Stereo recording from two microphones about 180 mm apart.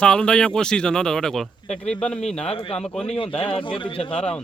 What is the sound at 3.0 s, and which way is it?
A man's voice, 35° left (ahead or behind).